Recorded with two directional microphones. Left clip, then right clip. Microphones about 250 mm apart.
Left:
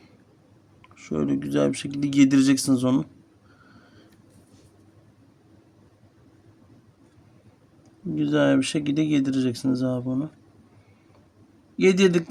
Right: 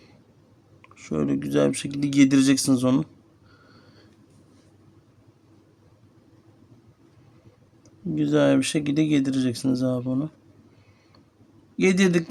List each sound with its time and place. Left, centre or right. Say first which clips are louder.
0.8 s speech: even; centre
8.1 s speech: right 1 dB; centre
11.8 s speech: left 2 dB; centre